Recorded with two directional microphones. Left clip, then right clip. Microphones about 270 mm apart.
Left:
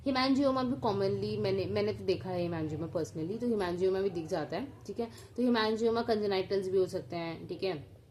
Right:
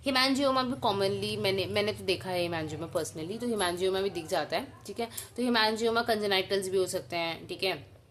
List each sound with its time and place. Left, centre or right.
0.0 s a woman's voice: centre